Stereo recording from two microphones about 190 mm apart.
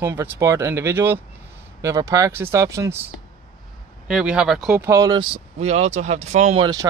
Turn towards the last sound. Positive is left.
turn(degrees=-20)  # may be behind; listen again after turning